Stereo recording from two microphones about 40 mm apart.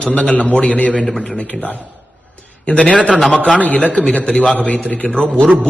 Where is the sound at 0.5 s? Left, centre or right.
Left.